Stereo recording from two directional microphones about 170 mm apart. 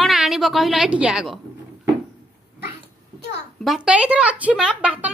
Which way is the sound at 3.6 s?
5° right (ahead or behind).